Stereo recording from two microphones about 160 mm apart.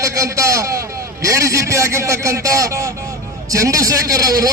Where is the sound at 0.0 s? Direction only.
20° right (ahead or behind).